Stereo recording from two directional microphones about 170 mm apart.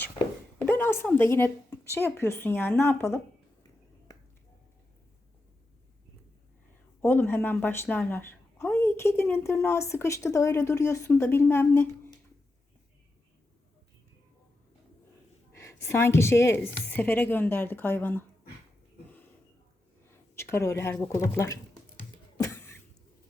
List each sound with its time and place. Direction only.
0.6 s a woman's voice: 10° left (ahead or behind)
7.0 s a woman's voice: 15° left (ahead or behind)
15.5 s a woman's voice: 15° left (ahead or behind)
20.3 s a woman's voice: 15° left (ahead or behind)
22.4 s cough: 15° left (ahead or behind)